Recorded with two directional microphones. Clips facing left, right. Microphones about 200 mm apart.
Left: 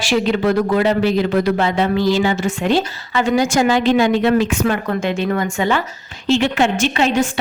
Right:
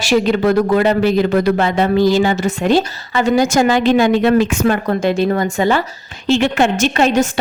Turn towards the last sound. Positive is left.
turn(degrees=-45)  # may be behind; listen again after turning